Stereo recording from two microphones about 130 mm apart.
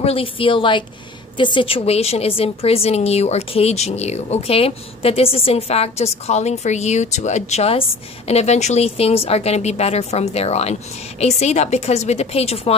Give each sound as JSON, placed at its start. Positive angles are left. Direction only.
{"t": 0.0, "sound": "a woman's voice", "side_deg": 45}